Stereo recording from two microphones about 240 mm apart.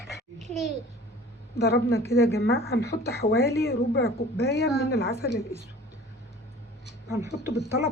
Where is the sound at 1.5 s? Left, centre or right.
Left.